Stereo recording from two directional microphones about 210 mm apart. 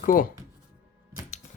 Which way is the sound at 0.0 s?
40° left (ahead or behind).